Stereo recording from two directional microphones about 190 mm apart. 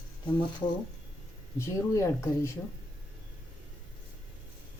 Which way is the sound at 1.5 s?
15° left (ahead or behind).